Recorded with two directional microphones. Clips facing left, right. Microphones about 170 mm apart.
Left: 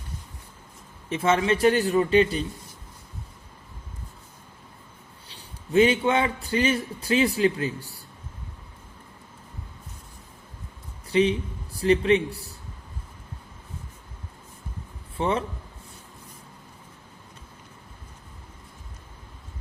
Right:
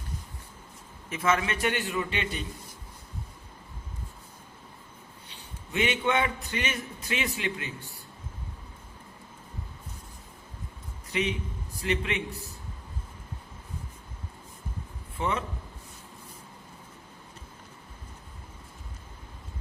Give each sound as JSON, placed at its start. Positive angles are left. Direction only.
{"t": 1.1, "sound": "a man's voice", "side_deg": 30}
{"t": 5.7, "sound": "a man's voice", "side_deg": 30}
{"t": 11.1, "sound": "a man's voice", "side_deg": 30}
{"t": 15.2, "sound": "a man's voice", "side_deg": 30}